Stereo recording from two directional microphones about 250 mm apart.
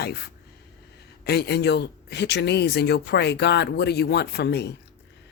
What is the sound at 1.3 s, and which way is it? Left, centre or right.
Speech, left.